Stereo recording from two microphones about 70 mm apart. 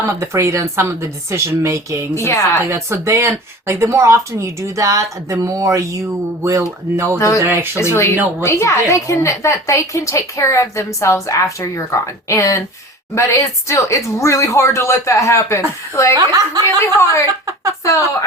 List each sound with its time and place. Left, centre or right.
0.1 s speech: right
2.1 s a woman's voice: left
2.6 s speech: right
7.2 s a woman's voice: left
7.4 s speech: right
7.8 s a woman's voice: left
16.1 s a woman's voice: right
16.6 s a woman's voice: left
17.4 s a sound: right